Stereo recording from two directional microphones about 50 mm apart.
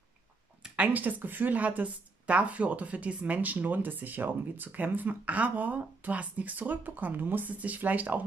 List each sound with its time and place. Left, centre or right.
0.7 s a woman's voice: right